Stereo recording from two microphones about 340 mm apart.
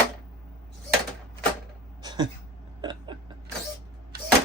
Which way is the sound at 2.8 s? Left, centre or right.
Centre.